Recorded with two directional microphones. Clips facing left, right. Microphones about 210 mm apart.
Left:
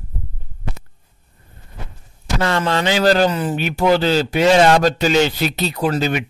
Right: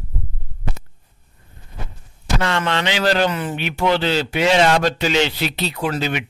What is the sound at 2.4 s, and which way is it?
Speech, 35° left (ahead or behind).